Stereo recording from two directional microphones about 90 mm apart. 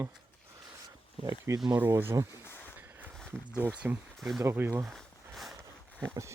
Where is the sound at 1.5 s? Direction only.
30° right (ahead or behind).